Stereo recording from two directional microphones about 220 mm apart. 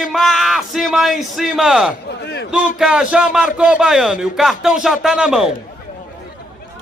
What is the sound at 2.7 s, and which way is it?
A man's voice, 5° right (ahead or behind).